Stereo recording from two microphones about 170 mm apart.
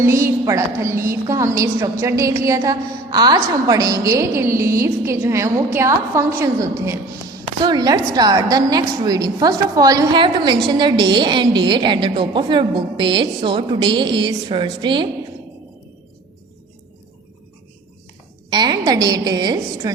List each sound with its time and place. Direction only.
0.0 s a woman's voice: 15° right (ahead or behind)
18.5 s a woman's voice: 25° right (ahead or behind)